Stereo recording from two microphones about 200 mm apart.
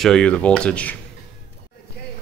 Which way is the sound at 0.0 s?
5° left (ahead or behind).